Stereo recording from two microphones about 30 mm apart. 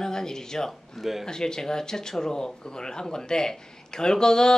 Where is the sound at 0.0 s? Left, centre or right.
Centre.